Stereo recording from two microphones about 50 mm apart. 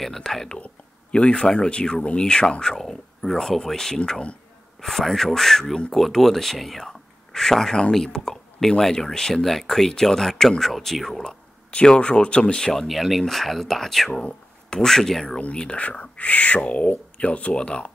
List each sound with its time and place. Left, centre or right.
0.0 s speech: centre
1.1 s speech: centre
4.7 s speech: centre
11.7 s speech: centre
12.8 s speech: centre
14.2 s a sound: centre
14.9 s speech: centre
15.3 s speech: centre